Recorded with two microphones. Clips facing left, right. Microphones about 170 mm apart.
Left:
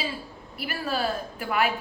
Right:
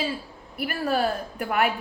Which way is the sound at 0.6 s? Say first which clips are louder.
Right 4 dB; 60° right (ahead or behind).